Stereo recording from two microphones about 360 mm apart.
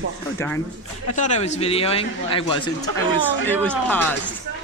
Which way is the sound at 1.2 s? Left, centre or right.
Centre.